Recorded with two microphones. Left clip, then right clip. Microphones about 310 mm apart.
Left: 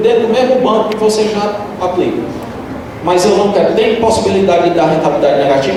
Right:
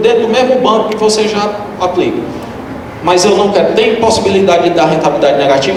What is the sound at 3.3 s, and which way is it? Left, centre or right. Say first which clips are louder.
Speech: even; right.